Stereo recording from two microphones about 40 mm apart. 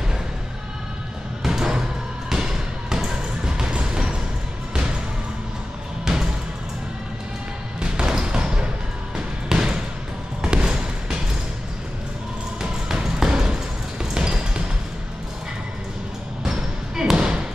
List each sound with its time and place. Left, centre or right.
1.4 s music: centre
7.8 s basketball bounce: right
12.8 s basketball bounce: centre
17.0 s basketball bounce: right